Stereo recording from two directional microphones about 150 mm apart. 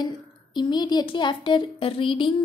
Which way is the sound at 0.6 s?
30° left (ahead or behind).